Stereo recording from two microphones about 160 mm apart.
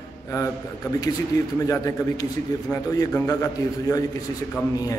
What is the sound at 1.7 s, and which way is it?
A man's voice, 20° left (ahead or behind).